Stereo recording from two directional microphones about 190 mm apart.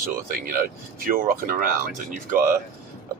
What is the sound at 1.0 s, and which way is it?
Speech, 45° right (ahead or behind).